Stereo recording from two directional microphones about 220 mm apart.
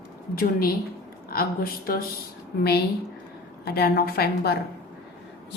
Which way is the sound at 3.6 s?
45° left (ahead or behind).